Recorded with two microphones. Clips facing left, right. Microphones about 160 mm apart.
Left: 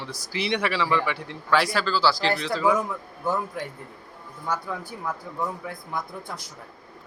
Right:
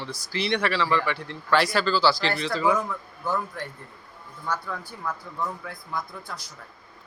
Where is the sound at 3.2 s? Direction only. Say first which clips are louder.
Left 2 dB; 20° left (ahead or behind).